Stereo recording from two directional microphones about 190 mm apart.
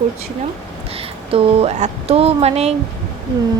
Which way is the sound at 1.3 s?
30° right (ahead or behind).